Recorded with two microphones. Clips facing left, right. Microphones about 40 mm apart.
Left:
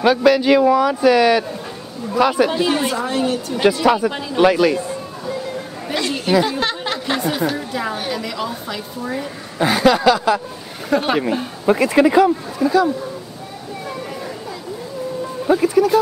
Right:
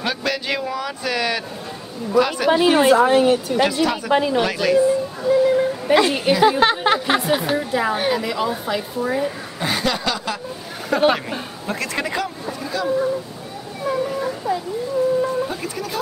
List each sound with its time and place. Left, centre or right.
0.0 s a man's voice: centre
2.5 s a woman's voice: centre
3.8 s speech: centre
4.1 s speech: right
4.4 s speech: centre
5.4 s a sound: centre
7.2 s a woman's voice: centre
9.6 s a man's voice: centre
11.6 s speech: centre
12.5 s a man's voice: centre
15.4 s speech: centre